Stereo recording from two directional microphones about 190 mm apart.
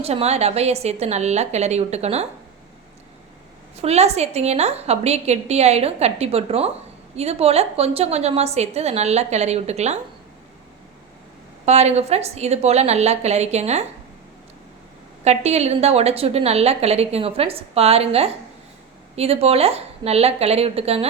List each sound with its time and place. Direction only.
0.0 s a woman's voice: 35° right (ahead or behind)
3.8 s a woman's voice: 35° right (ahead or behind)
11.6 s a woman's voice: 35° right (ahead or behind)
15.2 s a woman's voice: 35° right (ahead or behind)